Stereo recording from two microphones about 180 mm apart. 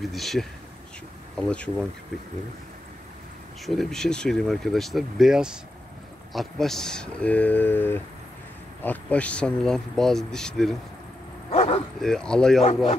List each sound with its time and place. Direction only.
0.0 s speech: centre (ahead or behind)
3.6 s speech: centre (ahead or behind)
11.5 s speech: 35° left (ahead or behind)
12.0 s speech: 5° left (ahead or behind)